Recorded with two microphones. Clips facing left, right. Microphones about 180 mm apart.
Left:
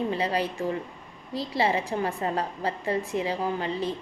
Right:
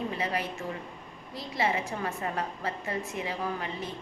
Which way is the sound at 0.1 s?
30° left (ahead or behind).